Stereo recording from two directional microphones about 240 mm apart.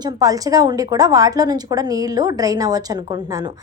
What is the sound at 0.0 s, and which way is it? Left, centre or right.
A woman's voice, centre.